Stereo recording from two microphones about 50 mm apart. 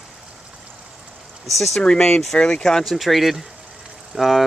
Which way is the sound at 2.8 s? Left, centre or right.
Centre.